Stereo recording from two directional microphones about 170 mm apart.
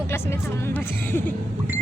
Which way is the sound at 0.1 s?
15° left (ahead or behind).